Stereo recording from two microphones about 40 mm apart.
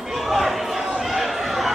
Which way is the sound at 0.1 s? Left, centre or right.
Centre.